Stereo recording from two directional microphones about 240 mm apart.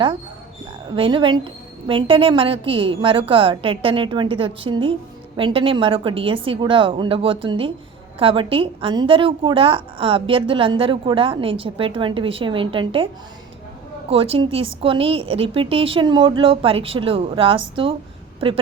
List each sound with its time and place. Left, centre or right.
0.9 s a woman's voice: right
14.1 s a woman's voice: right